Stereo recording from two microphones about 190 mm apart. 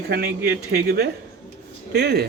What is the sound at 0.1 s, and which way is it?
Speech, 55° right (ahead or behind).